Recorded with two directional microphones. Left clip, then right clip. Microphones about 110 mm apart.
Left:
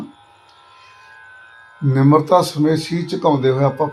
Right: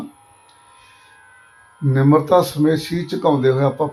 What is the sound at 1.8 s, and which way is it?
Speech, 60° left (ahead or behind).